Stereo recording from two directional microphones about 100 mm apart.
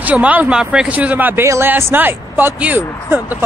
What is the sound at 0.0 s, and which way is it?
Speech, 15° right (ahead or behind).